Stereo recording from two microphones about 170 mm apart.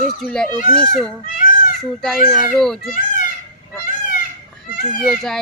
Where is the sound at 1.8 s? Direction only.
Centre (ahead or behind).